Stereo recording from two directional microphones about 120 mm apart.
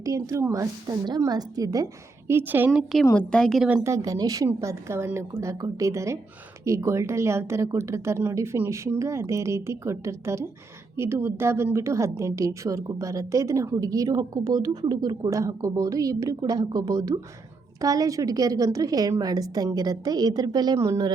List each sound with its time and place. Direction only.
0.0 s a woman's voice: 25° right (ahead or behind)
3.1 s a woman's voice: 10° left (ahead or behind)
3.8 s a woman's voice: 25° right (ahead or behind)
20.7 s a woman's voice: 25° right (ahead or behind)